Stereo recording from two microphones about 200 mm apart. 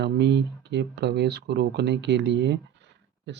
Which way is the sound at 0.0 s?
60° right (ahead or behind).